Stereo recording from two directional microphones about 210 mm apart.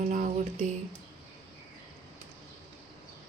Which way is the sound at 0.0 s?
35° right (ahead or behind).